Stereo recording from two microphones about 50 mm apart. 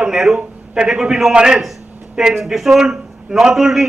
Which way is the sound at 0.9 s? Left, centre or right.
Centre.